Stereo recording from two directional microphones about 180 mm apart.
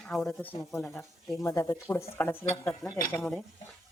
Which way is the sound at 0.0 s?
5° left (ahead or behind).